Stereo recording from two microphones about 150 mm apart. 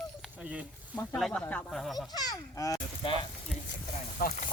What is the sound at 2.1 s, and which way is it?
Honk, 25° left (ahead or behind).